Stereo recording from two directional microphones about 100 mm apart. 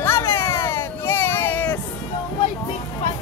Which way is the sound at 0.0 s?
25° left (ahead or behind).